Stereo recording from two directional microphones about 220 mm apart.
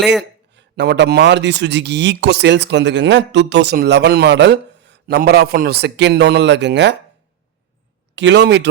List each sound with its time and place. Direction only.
0.5 s speech: 50° right (ahead or behind)
8.1 s speech: 55° right (ahead or behind)